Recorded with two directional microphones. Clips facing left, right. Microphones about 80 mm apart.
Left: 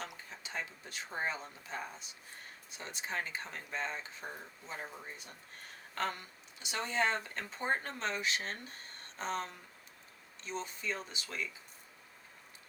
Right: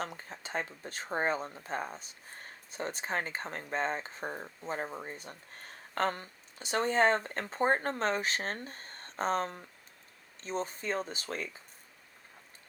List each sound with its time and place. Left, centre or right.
0.0 s speech: right